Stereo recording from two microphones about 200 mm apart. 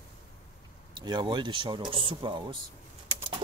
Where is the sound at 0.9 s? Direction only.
20° right (ahead or behind).